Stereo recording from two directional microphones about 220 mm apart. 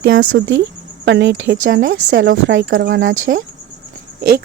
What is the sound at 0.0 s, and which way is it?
Speech, 55° right (ahead or behind).